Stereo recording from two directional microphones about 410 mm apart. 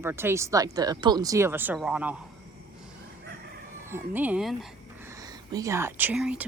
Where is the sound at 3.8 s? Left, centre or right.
Centre.